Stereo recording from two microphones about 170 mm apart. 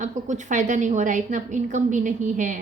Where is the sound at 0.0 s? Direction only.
45° right (ahead or behind).